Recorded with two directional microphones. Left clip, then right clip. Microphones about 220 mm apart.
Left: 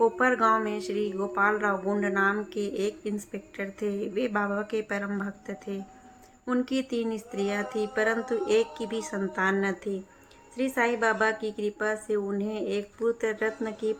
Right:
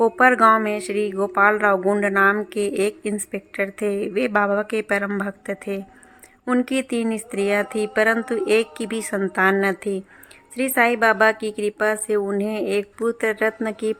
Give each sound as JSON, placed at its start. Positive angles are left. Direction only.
{"t": 0.0, "sound": "speech", "side_deg": -40}